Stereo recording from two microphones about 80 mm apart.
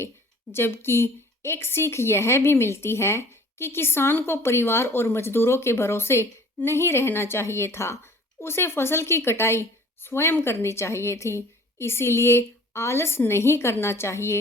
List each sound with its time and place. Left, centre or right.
0.5 s speech: left